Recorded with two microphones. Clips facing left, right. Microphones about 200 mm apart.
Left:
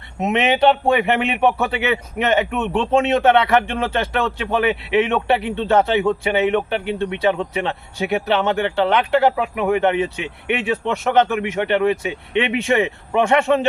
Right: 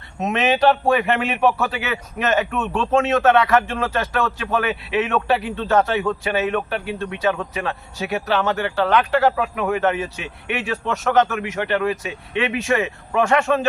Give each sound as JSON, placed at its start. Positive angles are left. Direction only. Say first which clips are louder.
{"t": 0.2, "sound": "speech", "louder": "left 2 dB", "side_deg": 20}